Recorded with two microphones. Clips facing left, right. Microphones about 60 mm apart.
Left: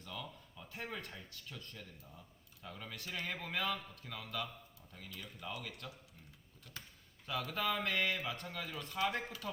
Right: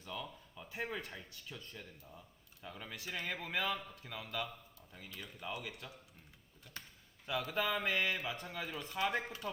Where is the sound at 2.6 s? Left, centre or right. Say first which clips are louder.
Right 1 dB; centre.